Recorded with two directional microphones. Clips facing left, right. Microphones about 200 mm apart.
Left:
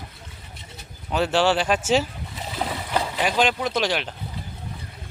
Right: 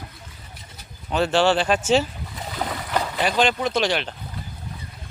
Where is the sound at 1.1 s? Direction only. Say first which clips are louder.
Right 1 dB; 5° left (ahead or behind).